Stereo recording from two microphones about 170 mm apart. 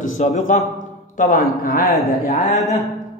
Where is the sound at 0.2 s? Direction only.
40° left (ahead or behind).